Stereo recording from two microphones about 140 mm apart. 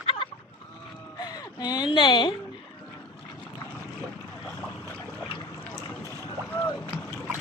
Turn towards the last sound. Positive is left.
turn(degrees=15)  # may be behind; listen again after turning